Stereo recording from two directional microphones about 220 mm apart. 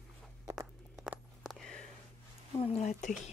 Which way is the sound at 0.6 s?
Centre (ahead or behind).